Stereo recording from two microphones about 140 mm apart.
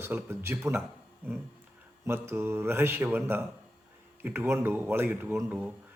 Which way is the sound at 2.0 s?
15° right (ahead or behind).